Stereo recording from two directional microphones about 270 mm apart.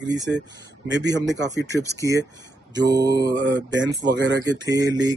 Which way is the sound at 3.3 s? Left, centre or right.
Right.